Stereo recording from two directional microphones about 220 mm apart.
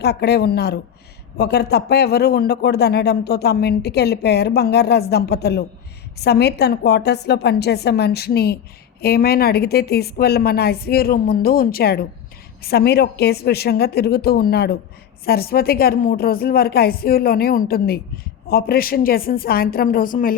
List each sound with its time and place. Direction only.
0.0 s a man's voice: 50° left (ahead or behind)